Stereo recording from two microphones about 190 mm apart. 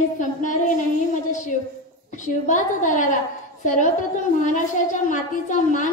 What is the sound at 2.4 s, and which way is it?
Speech, 40° left (ahead or behind).